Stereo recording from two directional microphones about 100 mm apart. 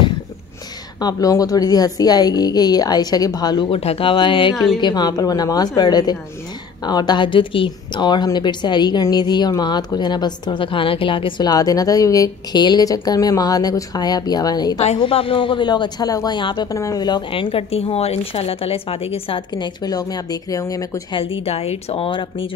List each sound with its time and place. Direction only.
1.0 s a woman's voice: 35° left (ahead or behind)
3.7 s a man's voice: 80° left; by 4.6 s 55° left (ahead or behind)
4.7 s a woman's voice: 45° left (ahead or behind)
11.4 s a woman's voice: 40° left (ahead or behind)
14.8 s a man's voice: 75° left (ahead or behind); by 16.3 s 40° left (ahead or behind)
16.3 s a woman's voice: 55° left (ahead or behind)
16.7 s a woman's voice: 30° left (ahead or behind)
17.3 s a woman's voice: 65° left (ahead or behind)
19.5 s a woman's voice: 45° left (ahead or behind)
21.1 s a woman's voice: 65° left (ahead or behind)